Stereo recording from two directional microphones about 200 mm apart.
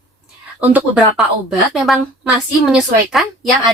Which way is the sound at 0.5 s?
5° right (ahead or behind).